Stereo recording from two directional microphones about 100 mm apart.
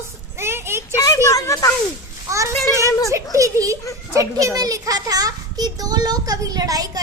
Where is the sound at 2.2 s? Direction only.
30° right (ahead or behind).